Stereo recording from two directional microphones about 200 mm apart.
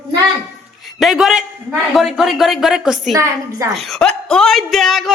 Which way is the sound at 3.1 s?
15° right (ahead or behind).